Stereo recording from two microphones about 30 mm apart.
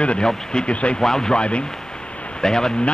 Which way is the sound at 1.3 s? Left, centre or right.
Left.